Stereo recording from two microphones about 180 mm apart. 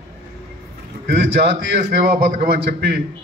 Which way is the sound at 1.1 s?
65° right (ahead or behind).